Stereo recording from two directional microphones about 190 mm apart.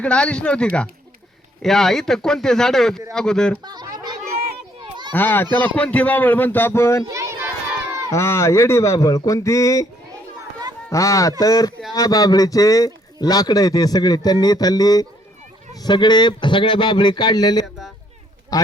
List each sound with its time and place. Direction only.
0.0 s speech: 5° left (ahead or behind)
3.6 s a sound: 20° right (ahead or behind)
5.1 s a man's voice: 10° left (ahead or behind)
7.1 s children playing: 15° right (ahead or behind)
8.1 s a man's voice: 15° left (ahead or behind)
10.8 s a man's voice: 15° left (ahead or behind)